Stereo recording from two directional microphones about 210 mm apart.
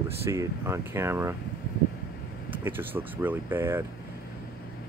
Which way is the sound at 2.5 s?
10° right (ahead or behind).